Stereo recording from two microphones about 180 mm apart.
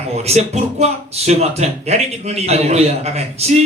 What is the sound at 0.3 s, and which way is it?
Speech, 35° right (ahead or behind).